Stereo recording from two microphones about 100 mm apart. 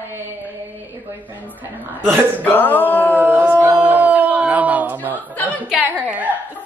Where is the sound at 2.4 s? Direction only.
20° left (ahead or behind).